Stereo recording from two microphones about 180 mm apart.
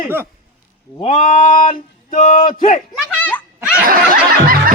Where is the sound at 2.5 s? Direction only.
30° left (ahead or behind).